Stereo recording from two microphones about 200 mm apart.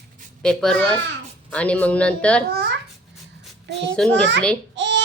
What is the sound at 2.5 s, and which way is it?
Babbling, 55° right (ahead or behind).